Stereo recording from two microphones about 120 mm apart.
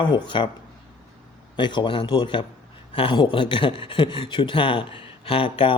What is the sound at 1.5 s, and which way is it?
Speech, 40° left (ahead or behind).